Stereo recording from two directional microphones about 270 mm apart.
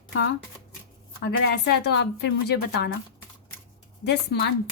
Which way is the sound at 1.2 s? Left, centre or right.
Left.